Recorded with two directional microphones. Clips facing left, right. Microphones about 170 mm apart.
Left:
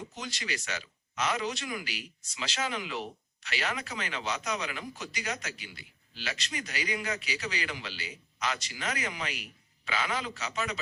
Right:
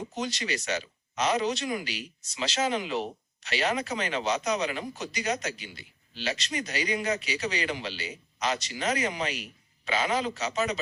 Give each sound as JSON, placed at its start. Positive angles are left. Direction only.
{"t": 0.0, "sound": "a man's voice", "side_deg": -20}
{"t": 10.3, "sound": "speech", "side_deg": -40}